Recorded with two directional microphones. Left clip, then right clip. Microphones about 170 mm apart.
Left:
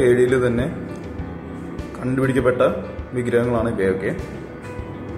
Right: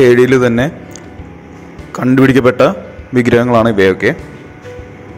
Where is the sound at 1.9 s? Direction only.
50° right (ahead or behind).